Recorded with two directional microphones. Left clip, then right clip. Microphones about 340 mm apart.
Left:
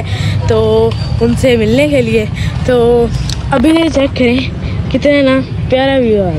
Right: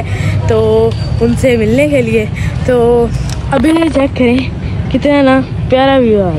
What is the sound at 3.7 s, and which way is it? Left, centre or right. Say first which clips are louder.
Speech: even; centre.